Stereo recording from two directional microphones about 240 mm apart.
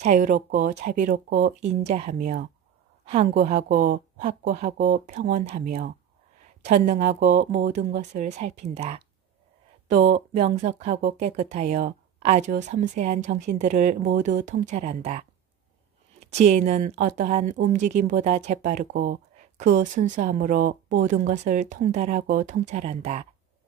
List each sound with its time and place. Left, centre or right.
0.0 s a woman's voice: right